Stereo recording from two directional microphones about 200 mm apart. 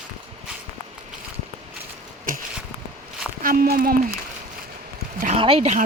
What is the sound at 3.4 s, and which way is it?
Speech, 45° right (ahead or behind).